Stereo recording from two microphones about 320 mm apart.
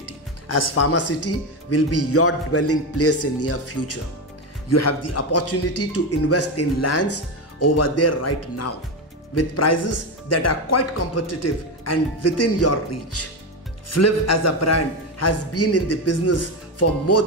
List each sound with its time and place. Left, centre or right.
0.0 s speech: left